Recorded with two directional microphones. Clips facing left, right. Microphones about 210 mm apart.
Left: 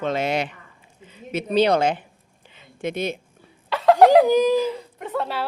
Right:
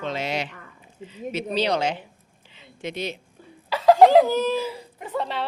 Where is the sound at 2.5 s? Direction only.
50° left (ahead or behind).